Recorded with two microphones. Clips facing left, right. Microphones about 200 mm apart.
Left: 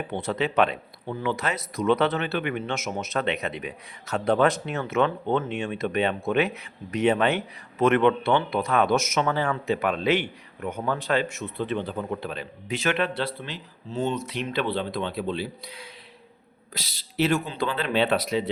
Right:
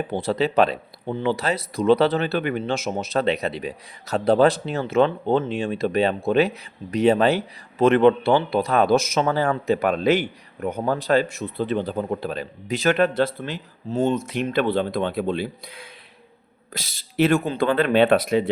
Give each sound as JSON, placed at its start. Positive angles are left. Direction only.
{"t": 0.1, "sound": "speech", "side_deg": -35}